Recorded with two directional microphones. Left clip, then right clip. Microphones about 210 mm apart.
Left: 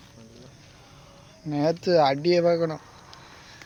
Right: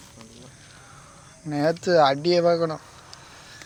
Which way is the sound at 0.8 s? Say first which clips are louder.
Right 3 dB; 15° left (ahead or behind).